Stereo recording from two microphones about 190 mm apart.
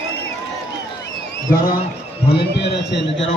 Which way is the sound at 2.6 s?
70° left (ahead or behind).